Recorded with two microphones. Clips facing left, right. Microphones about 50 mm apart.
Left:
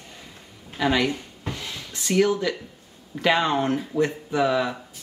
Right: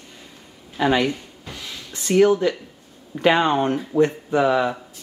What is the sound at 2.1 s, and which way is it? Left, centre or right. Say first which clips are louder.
Speech: right 5 dB; centre.